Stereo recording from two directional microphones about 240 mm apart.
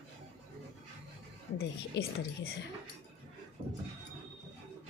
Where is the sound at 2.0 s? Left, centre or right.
Left.